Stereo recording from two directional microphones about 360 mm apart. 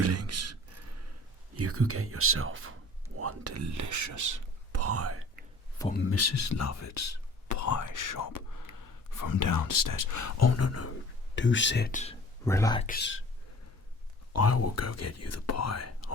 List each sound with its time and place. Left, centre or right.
0.0 s beatboxing: right
1.5 s speech: right
4.8 s whispering: right
6.0 s speech: left
11.3 s speech: left
12.5 s speech: centre
12.9 s speech: left
14.3 s speech: left